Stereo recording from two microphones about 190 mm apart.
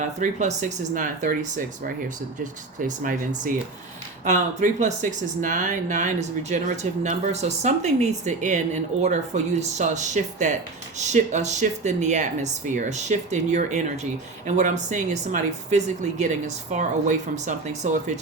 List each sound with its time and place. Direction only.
0.2 s speech: 40° right (ahead or behind)